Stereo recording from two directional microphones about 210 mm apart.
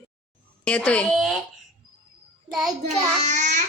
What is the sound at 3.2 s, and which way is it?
Speech, 35° right (ahead or behind).